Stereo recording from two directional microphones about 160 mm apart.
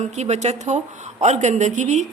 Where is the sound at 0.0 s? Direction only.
45° right (ahead or behind).